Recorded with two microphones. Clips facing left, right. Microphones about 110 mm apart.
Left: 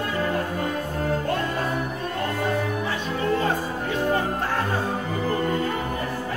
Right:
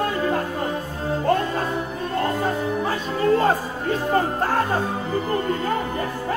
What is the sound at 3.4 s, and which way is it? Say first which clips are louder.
Music: right 4 dB; 40° right (ahead or behind).